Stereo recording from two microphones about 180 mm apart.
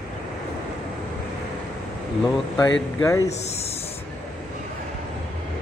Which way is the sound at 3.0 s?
15° left (ahead or behind).